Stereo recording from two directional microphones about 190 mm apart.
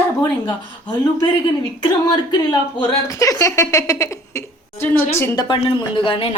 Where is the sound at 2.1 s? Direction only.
20° left (ahead or behind).